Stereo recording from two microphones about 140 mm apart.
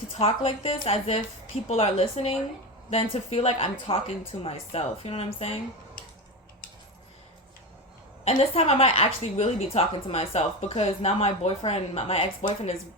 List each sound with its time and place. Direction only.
0.1 s a woman's voice: 40° left (ahead or behind)
8.2 s a woman's voice: 45° left (ahead or behind)